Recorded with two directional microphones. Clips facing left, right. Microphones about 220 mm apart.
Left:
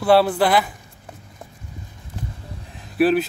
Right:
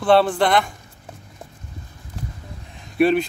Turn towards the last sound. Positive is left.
turn(degrees=5)  # may be behind; listen again after turning